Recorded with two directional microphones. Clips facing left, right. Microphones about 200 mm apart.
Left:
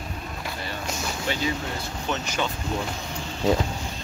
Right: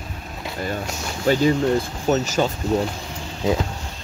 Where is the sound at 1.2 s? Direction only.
45° right (ahead or behind).